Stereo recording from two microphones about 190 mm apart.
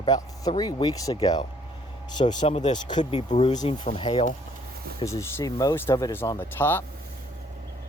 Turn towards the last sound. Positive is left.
turn(degrees=10)  # may be behind; listen again after turning